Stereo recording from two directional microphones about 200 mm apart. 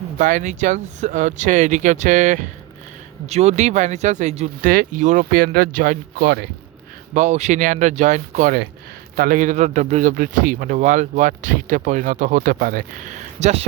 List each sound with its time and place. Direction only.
0.2 s a man's voice: 40° right (ahead or behind)
7.1 s a man's voice: 35° right (ahead or behind)